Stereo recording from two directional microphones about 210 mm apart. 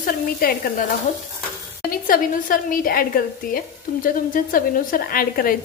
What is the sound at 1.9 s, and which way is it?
Stir, 40° left (ahead or behind).